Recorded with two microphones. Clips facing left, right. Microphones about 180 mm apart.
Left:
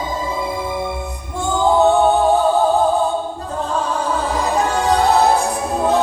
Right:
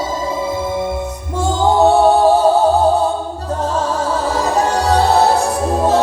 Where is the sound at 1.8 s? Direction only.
35° right (ahead or behind).